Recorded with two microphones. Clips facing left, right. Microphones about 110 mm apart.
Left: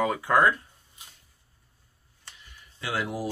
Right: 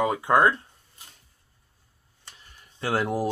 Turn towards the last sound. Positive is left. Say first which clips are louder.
# right 5 dB
turn(degrees=-45)  # may be behind; listen again after turning